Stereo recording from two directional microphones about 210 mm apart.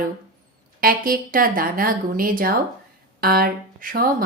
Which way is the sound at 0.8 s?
45° right (ahead or behind).